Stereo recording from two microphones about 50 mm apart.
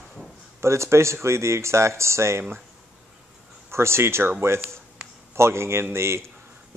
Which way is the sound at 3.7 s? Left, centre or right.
Right.